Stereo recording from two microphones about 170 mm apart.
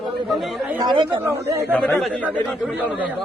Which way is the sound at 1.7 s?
5° left (ahead or behind).